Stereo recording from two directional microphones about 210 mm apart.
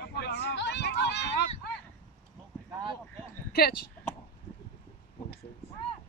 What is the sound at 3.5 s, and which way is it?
Speech, 45° left (ahead or behind).